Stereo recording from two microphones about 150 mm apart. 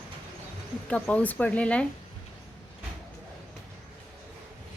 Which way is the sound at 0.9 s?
10° left (ahead or behind).